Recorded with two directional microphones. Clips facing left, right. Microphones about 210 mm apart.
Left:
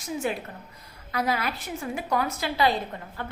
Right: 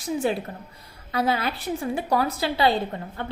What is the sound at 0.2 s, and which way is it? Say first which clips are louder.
A woman's voice: right 4 dB; 30° right (ahead or behind).